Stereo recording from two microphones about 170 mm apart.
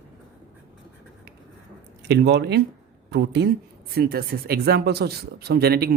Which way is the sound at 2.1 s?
75° right (ahead or behind).